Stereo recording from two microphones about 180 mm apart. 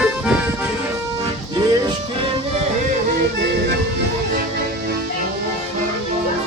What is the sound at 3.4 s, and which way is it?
Music, 65° right (ahead or behind).